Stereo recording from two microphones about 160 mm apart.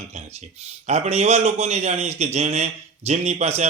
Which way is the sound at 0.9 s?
45° right (ahead or behind).